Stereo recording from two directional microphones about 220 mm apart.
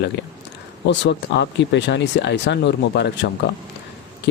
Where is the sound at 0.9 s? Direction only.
50° left (ahead or behind).